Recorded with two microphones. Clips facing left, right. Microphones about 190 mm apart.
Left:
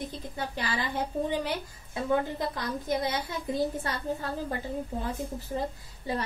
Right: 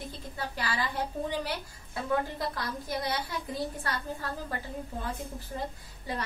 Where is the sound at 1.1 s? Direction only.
30° left (ahead or behind).